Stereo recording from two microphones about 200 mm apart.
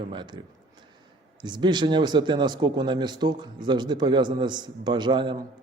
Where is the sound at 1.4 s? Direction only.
20° right (ahead or behind).